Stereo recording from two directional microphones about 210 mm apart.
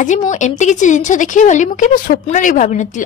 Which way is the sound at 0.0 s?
35° left (ahead or behind).